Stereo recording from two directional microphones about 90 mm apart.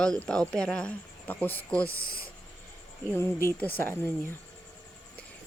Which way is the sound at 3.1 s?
25° left (ahead or behind).